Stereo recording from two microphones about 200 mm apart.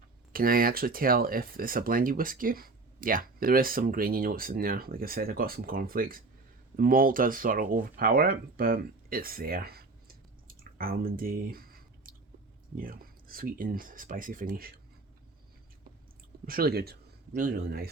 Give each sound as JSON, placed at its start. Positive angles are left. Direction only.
{"t": 0.3, "sound": "speech", "side_deg": -45}
{"t": 16.5, "sound": "speech", "side_deg": -50}